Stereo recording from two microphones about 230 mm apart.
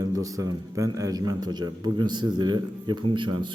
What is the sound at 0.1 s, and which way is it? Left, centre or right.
A man's voice, centre.